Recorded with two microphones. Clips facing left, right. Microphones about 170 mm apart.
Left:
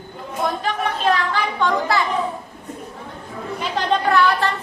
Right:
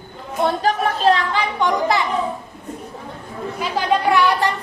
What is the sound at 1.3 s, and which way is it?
Speech, 15° right (ahead or behind).